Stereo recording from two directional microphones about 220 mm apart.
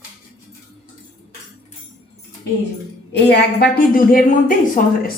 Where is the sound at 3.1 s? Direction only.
50° left (ahead or behind).